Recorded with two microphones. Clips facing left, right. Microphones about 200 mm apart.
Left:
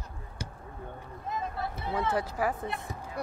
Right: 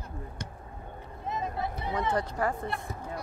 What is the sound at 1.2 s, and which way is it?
Vehicle, 20° right (ahead or behind).